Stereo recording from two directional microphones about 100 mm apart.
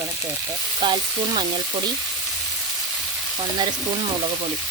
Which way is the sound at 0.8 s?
50° right (ahead or behind).